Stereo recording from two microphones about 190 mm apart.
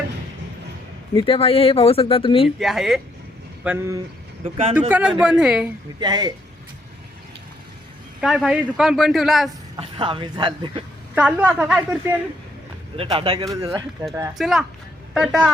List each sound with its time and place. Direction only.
1.1 s speech: 25° left (ahead or behind)
2.6 s a man's voice: centre (ahead or behind)
4.4 s speech: 35° right (ahead or behind)
4.9 s a man's voice: 10° right (ahead or behind)
6.0 s speech: 20° right (ahead or behind)
8.2 s a man's voice: centre (ahead or behind)
9.8 s speech: 25° right (ahead or behind)
11.1 s a woman's voice: 5° right (ahead or behind)
13.0 s speech: 30° right (ahead or behind)
14.3 s a man's voice: centre (ahead or behind)